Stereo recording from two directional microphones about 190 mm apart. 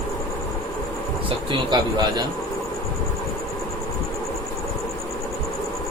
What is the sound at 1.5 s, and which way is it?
Speech, 25° right (ahead or behind).